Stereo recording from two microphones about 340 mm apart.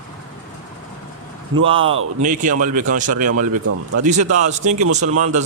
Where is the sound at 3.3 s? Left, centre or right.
Right.